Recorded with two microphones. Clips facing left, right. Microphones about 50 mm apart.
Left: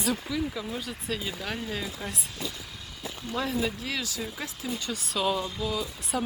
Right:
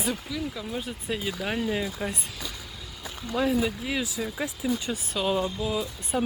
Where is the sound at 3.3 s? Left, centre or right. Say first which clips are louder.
Right 5 dB; centre.